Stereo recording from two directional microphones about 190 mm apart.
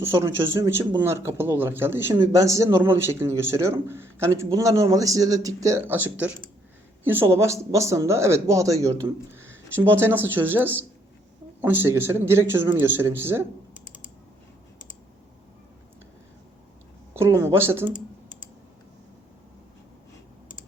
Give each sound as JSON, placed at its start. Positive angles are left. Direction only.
{"t": 0.0, "sound": "speech", "side_deg": -15}
{"t": 17.2, "sound": "speech", "side_deg": -15}